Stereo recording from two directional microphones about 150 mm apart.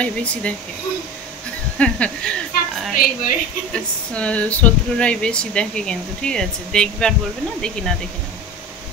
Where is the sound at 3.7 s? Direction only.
10° left (ahead or behind).